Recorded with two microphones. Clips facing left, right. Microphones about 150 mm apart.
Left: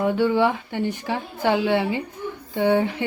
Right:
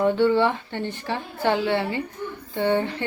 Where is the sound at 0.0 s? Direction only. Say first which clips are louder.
Even; 10° left (ahead or behind).